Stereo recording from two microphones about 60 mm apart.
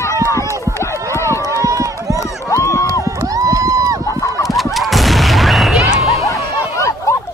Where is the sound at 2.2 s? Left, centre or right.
Left.